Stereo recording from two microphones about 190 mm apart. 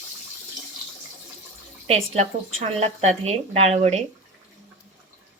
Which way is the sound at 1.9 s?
30° right (ahead or behind).